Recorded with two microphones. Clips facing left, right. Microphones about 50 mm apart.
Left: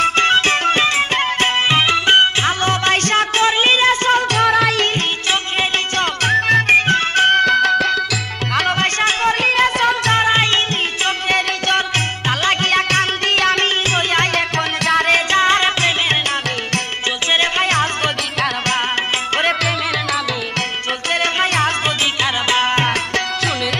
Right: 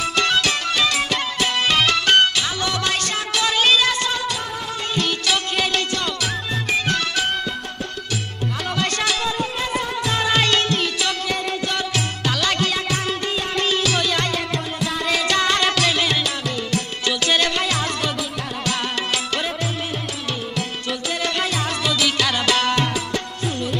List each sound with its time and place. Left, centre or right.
0.0 s music: left
1.7 s music: left
2.4 s music: left
3.4 s music: left
4.4 s music: left
5.9 s music: left
9.4 s music: left
10.1 s music: left
11.2 s music: left
14.9 s music: left
15.3 s music: left
17.3 s music: left
21.1 s music: left
22.2 s music: left